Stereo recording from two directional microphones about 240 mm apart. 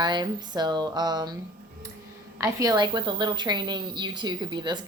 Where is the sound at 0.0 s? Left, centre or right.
Centre.